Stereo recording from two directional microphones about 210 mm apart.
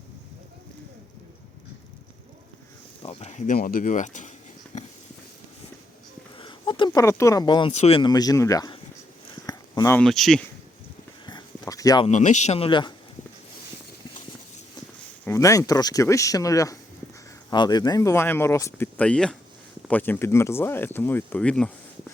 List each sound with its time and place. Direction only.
3.0 s speech: 30° left (ahead or behind)
6.3 s speech: 25° left (ahead or behind)
9.3 s a sound: 20° left (ahead or behind)
10.0 s speech: centre (ahead or behind)
11.3 s a sound: 20° left (ahead or behind)
12.0 s speech: 35° left (ahead or behind)
15.2 s speech: 15° left (ahead or behind)